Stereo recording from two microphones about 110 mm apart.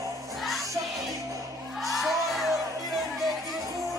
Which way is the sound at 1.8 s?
Centre (ahead or behind).